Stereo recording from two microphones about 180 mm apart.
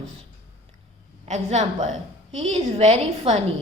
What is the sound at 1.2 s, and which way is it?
A woman's voice, 40° right (ahead or behind).